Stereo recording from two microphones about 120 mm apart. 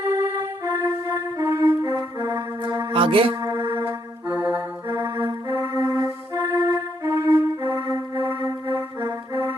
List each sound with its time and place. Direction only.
0.0 s music: 20° right (ahead or behind)
1.5 s music: 20° right (ahead or behind)
2.3 s mantra: 40° right (ahead or behind)
3.5 s music: 20° right (ahead or behind)